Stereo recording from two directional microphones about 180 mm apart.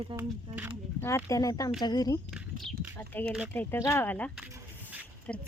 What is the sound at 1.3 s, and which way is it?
Speech, 20° left (ahead or behind).